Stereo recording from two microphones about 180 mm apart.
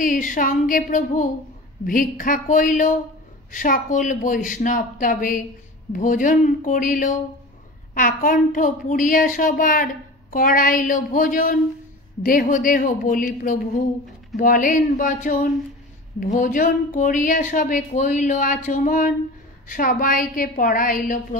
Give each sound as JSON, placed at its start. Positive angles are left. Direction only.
{"t": 0.0, "sound": "a woman's voice", "side_deg": 45}